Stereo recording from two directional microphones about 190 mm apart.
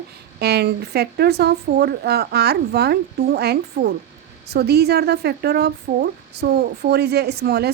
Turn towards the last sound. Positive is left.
turn(degrees=-60)  # may be behind; listen again after turning